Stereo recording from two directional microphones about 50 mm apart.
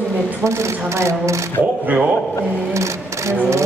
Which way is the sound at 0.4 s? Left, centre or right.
Right.